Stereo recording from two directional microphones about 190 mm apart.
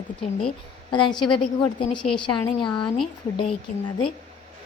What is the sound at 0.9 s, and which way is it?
A woman's voice, 25° left (ahead or behind).